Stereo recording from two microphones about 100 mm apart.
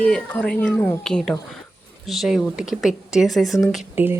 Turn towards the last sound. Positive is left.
turn(degrees=-20)  # may be behind; listen again after turning